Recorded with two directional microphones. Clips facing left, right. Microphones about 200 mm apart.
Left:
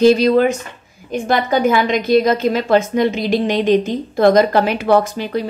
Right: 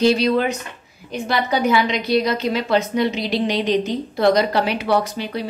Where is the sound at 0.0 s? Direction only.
45° left (ahead or behind).